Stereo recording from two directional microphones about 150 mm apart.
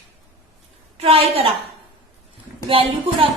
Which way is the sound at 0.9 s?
40° right (ahead or behind).